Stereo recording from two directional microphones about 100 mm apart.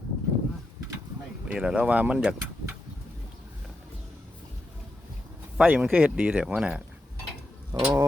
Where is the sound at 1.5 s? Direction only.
10° right (ahead or behind).